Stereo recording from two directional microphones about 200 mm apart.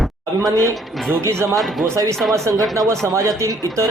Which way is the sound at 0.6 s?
Centre (ahead or behind).